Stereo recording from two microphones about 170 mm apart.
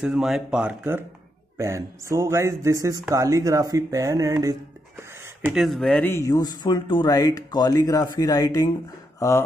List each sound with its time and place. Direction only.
0.0 s speech: 5° right (ahead or behind); by 8.6 s 20° left (ahead or behind)